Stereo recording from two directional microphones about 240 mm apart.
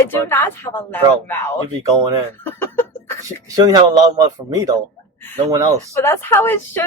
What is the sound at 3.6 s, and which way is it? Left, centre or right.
Speech, centre.